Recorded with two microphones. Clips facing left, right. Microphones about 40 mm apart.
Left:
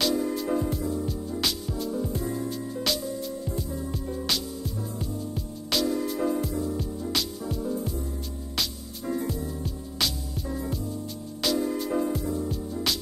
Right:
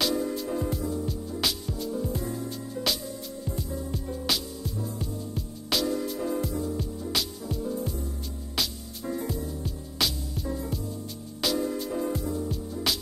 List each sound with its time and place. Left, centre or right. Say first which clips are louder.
0.0 s music: left 2 dB; centre
3.4 s music: left 2 dB; centre